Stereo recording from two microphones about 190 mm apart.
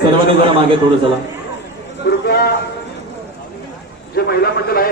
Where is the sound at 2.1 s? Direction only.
60° left (ahead or behind).